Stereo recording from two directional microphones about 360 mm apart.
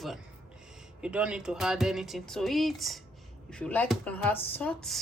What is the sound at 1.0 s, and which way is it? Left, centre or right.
A woman's voice, centre.